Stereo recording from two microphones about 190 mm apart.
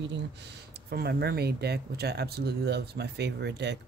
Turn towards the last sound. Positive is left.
turn(degrees=-60)  # may be behind; listen again after turning